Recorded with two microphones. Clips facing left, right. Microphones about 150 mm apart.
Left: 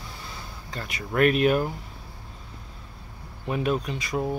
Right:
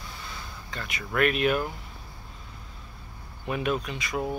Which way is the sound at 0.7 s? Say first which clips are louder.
Left 2 dB; 35° left (ahead or behind).